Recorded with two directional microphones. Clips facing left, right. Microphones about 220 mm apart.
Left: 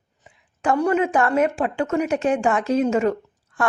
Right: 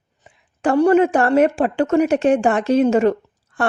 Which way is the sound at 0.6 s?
30° right (ahead or behind).